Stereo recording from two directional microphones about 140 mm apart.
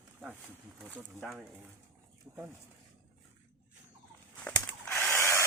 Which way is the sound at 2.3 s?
20° right (ahead or behind).